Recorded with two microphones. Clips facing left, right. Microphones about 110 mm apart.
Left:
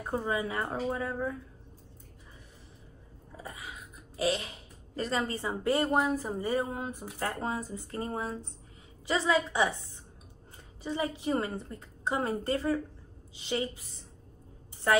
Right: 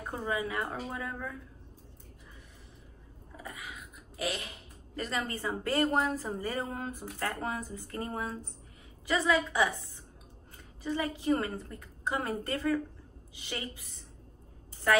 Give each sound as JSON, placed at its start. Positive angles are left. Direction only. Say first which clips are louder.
{"t": 0.1, "sound": "a woman's voice", "louder": "left 2 dB", "side_deg": 30}
{"t": 3.4, "sound": "a sound", "louder": "even", "side_deg": 35}
{"t": 4.9, "sound": "a woman's voice", "louder": "left 3 dB", "side_deg": 30}
{"t": 5.8, "sound": "speech", "louder": "right 1 dB", "side_deg": 5}
{"t": 6.2, "sound": "a woman's voice", "louder": "left 4 dB", "side_deg": 15}
{"t": 10.8, "sound": "a woman's voice", "louder": "even", "side_deg": 20}